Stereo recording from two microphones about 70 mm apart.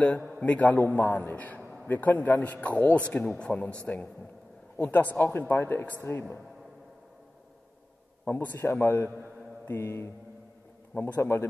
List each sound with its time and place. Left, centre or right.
0.4 s a man's voice: left
4.7 s a man's voice: left
8.3 s a man's voice: left